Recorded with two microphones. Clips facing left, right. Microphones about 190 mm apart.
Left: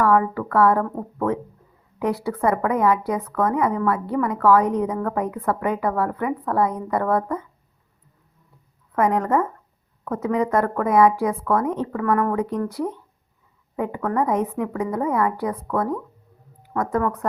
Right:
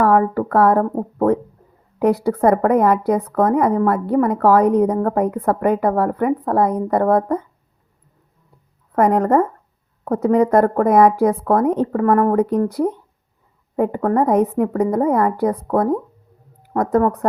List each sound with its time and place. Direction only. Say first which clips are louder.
0.0 s a woman's voice: right 4 dB; 45° right (ahead or behind)
8.9 s a woman's voice: right 5 dB; 45° right (ahead or behind)